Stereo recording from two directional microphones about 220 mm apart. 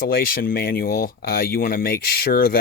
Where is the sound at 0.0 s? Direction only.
40° left (ahead or behind).